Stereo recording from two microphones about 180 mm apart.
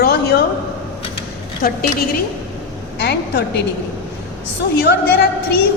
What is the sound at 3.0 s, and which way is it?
Speech, 65° left (ahead or behind).